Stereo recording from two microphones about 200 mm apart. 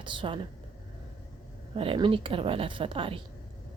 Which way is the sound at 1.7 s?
25° right (ahead or behind).